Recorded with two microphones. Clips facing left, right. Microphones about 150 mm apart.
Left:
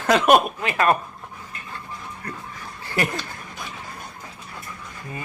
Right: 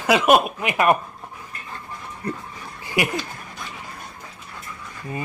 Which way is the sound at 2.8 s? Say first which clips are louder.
Right 2 dB; 15° right (ahead or behind).